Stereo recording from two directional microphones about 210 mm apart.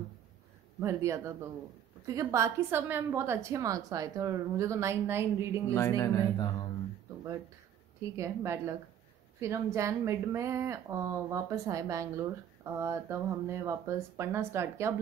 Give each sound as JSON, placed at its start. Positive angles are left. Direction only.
{"t": 0.7, "sound": "a woman's voice", "side_deg": -15}
{"t": 5.8, "sound": "speech", "side_deg": 15}
{"t": 8.2, "sound": "a woman's voice", "side_deg": -15}